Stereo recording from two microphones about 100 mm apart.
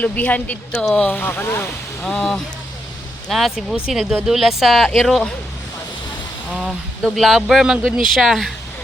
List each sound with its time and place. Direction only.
0.0 s speech: 15° left (ahead or behind)
2.0 s speech: 5° left (ahead or behind)
6.5 s speech: 5° right (ahead or behind)